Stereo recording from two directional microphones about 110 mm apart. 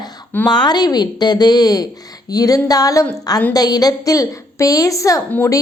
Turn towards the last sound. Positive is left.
turn(degrees=20)  # may be behind; listen again after turning